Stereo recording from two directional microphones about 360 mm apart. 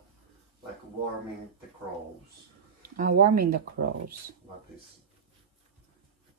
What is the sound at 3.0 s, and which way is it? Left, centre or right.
Speech, right.